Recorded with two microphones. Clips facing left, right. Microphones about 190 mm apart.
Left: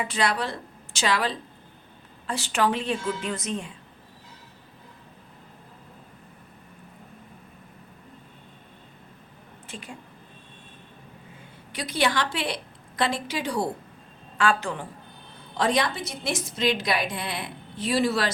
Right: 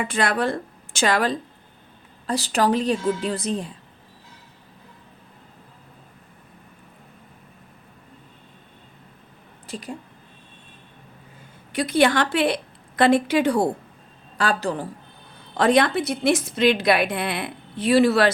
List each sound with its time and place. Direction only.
0.0 s a woman's voice: 50° right (ahead or behind); by 3.7 s 35° right (ahead or behind)
9.6 s speech: 35° right (ahead or behind)
11.7 s a woman's voice: 55° right (ahead or behind)
14.3 s a woman's voice: 35° right (ahead or behind)
15.5 s a woman's voice: 60° right (ahead or behind)